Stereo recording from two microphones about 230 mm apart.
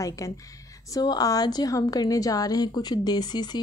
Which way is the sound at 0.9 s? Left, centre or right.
Centre.